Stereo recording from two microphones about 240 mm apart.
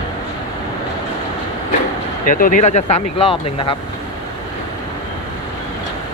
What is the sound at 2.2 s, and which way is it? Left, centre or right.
Speech, left.